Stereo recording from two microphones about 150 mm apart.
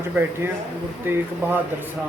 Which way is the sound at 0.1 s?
15° right (ahead or behind).